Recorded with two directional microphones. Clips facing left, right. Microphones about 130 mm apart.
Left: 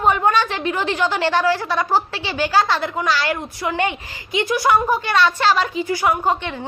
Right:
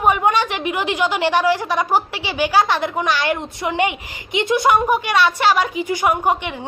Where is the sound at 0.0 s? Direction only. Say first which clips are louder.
Even; 15° right (ahead or behind).